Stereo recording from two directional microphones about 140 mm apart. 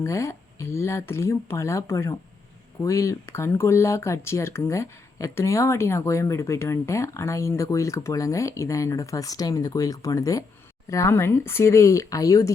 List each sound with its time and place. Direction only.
0.0 s speech: 20° left (ahead or behind)